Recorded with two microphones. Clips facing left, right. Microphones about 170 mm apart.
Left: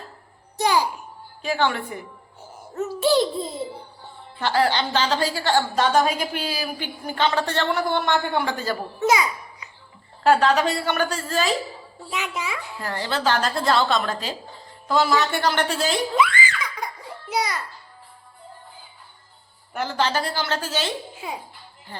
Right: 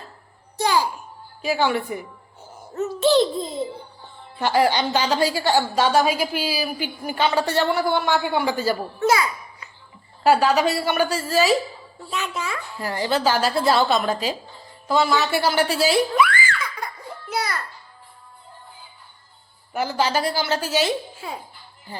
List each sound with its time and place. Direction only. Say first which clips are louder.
0.5 s a sound: even; 15° left (ahead or behind)
1.4 s a woman's voice: right 2 dB; 10° right (ahead or behind)
2.7 s a child's voice: right 2 dB; 10° left (ahead or behind)
4.4 s a woman's voice: right 2 dB; 15° right (ahead or behind)
9.0 s a child's voice: left 2 dB; 20° left (ahead or behind)
10.2 s a woman's voice: right 1 dB; 10° right (ahead or behind)
12.1 s a child's voice: right 1 dB; 15° left (ahead or behind)
12.8 s a woman's voice: right 3 dB; 10° right (ahead or behind)
16.1 s music: right 1 dB; 20° left (ahead or behind)
19.7 s a woman's voice: right 2 dB; 10° right (ahead or behind)